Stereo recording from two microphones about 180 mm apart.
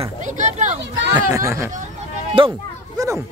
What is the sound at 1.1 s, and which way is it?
Speech, 15° right (ahead or behind).